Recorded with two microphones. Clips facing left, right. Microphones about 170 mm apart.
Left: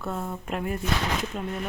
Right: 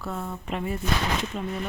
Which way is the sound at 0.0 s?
Centre (ahead or behind).